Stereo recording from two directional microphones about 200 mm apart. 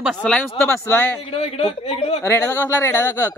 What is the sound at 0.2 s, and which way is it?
Speech, 5° left (ahead or behind).